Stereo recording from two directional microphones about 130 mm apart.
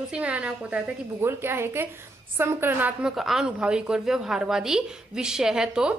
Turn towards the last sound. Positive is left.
turn(degrees=-5)  # may be behind; listen again after turning